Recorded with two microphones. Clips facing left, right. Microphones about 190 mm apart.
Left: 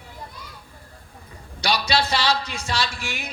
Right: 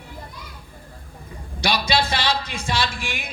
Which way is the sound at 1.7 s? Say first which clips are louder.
Even; 50° right (ahead or behind).